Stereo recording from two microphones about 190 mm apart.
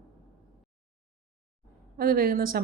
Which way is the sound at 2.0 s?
50° right (ahead or behind).